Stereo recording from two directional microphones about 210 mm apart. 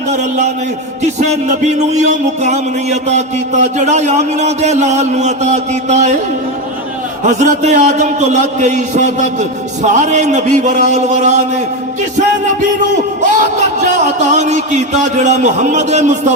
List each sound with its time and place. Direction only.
0.1 s a man's voice: 35° right (ahead or behind)
1.2 s music: 35° right (ahead or behind)
7.3 s music: 35° right (ahead or behind)
13.3 s music: 35° right (ahead or behind)